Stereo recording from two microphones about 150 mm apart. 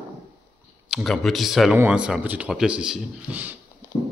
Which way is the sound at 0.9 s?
Centre (ahead or behind).